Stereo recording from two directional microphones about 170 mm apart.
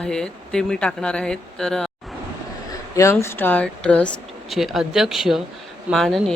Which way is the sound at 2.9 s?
15° left (ahead or behind).